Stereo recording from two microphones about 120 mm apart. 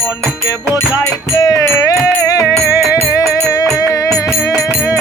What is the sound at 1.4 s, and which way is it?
Music, 30° left (ahead or behind).